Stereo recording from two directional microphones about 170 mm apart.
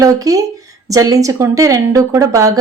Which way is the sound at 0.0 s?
20° right (ahead or behind).